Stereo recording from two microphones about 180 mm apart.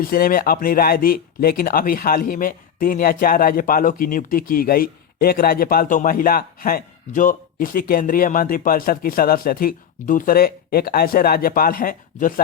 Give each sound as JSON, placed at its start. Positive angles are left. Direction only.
{"t": 0.0, "sound": "speech", "side_deg": 55}